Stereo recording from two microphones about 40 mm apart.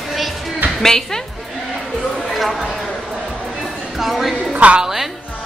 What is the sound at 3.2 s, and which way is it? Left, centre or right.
Music, centre.